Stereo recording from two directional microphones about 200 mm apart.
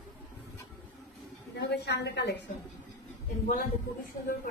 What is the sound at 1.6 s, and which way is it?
Speech, 55° left (ahead or behind).